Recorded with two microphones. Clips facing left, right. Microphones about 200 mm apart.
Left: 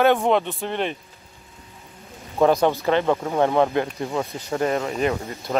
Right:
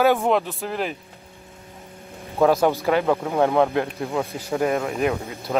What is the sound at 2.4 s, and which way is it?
Speech, 5° right (ahead or behind).